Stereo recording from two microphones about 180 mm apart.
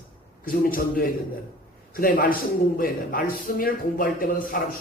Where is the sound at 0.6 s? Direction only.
55° left (ahead or behind).